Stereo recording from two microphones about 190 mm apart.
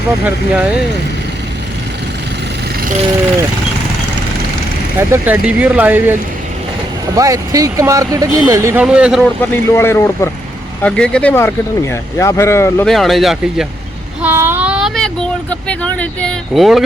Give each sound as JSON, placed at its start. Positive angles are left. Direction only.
{"t": 0.3, "sound": "speech", "side_deg": -5}
{"t": 4.9, "sound": "speech", "side_deg": -10}
{"t": 7.2, "sound": "speech", "side_deg": -15}
{"t": 9.4, "sound": "speech", "side_deg": 10}
{"t": 12.8, "sound": "speech", "side_deg": 0}
{"t": 14.2, "sound": "child singing", "side_deg": -10}
{"t": 15.8, "sound": "speech", "side_deg": 5}